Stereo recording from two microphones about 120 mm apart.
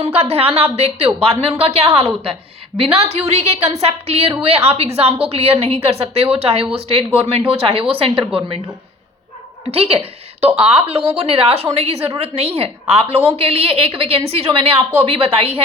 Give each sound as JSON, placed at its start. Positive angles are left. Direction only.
{"t": 0.0, "sound": "a woman's voice", "side_deg": -55}
{"t": 9.7, "sound": "a woman's voice", "side_deg": -55}